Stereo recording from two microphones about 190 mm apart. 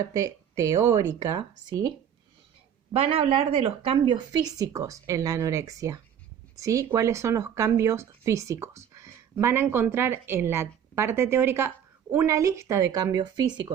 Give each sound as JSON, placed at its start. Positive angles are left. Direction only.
{"t": 0.0, "sound": "a woman's voice", "side_deg": -20}
{"t": 2.9, "sound": "a woman's voice", "side_deg": -30}